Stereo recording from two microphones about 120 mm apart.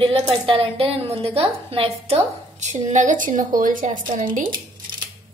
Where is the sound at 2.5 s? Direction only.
85° right.